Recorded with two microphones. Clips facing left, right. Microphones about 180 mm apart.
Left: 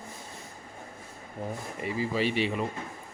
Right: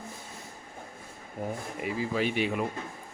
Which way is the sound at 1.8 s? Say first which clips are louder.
Left 1 dB; centre (ahead or behind).